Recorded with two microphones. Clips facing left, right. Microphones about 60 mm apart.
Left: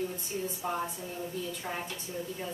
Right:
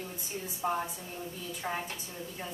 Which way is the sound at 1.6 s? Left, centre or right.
Right.